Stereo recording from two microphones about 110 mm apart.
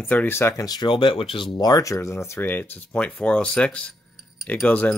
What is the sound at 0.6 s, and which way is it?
Speech, 40° left (ahead or behind).